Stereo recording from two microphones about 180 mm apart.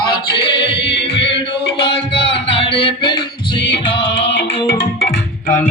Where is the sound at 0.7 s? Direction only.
75° left (ahead or behind).